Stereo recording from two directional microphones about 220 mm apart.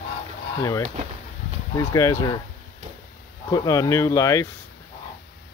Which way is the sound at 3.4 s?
15° left (ahead or behind).